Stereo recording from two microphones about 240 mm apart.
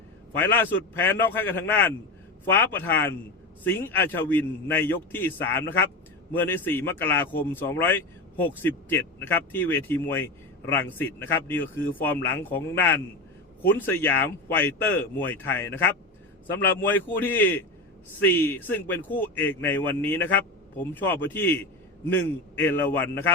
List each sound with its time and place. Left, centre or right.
0.3 s a man's voice: centre